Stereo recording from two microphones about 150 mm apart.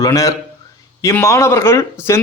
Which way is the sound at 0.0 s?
20° left (ahead or behind).